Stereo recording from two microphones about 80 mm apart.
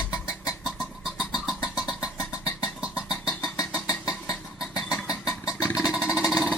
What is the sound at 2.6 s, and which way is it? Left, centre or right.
Music, centre.